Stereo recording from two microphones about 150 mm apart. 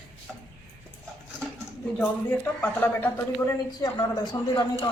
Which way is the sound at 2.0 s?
10° left (ahead or behind).